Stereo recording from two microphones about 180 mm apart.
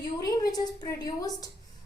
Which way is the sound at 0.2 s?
20° left (ahead or behind).